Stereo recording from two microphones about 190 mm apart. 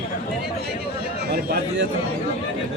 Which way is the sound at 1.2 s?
60° right (ahead or behind).